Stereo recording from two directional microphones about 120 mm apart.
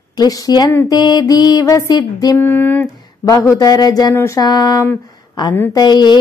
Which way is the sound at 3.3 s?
30° left (ahead or behind).